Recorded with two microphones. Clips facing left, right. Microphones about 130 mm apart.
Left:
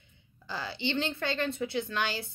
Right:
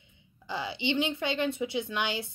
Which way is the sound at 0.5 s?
15° right (ahead or behind).